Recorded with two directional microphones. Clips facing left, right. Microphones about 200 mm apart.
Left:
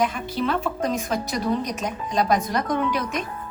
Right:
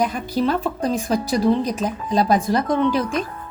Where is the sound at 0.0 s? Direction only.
40° right (ahead or behind).